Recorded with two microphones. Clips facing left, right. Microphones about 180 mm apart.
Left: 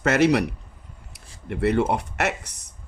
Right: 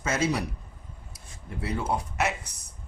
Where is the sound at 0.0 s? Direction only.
70° left (ahead or behind).